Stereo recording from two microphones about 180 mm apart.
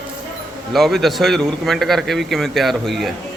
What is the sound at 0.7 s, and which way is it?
A man's voice, centre (ahead or behind).